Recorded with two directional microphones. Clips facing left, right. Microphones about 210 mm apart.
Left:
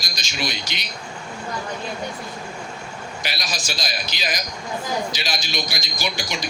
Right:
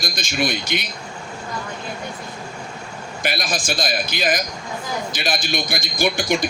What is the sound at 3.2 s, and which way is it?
A man's voice, 50° right (ahead or behind).